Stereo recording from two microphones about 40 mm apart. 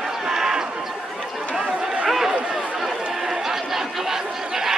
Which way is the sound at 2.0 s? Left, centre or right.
Centre.